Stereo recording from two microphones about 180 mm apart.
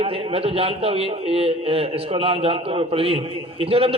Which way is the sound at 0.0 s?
30° right (ahead or behind).